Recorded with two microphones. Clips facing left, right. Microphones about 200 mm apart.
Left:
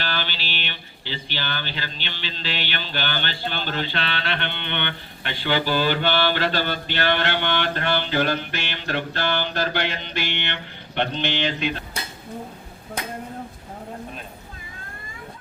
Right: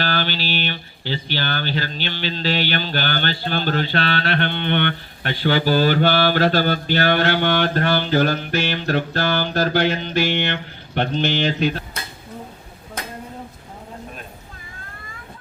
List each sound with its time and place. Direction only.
0.0 s speech: 45° right (ahead or behind)